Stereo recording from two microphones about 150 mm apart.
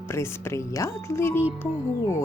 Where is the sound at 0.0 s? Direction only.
15° left (ahead or behind).